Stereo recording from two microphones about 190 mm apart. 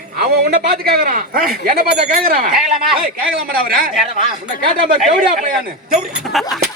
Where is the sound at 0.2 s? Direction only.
55° right (ahead or behind).